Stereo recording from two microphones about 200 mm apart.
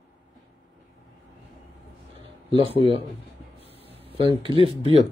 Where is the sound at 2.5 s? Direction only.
25° right (ahead or behind).